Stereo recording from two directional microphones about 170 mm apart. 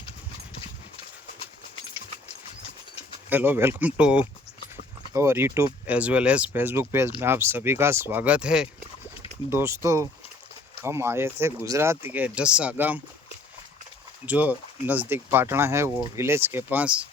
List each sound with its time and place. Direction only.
3.2 s speech: 10° right (ahead or behind)
9.5 s speech: 15° right (ahead or behind)
14.3 s speech: 10° right (ahead or behind)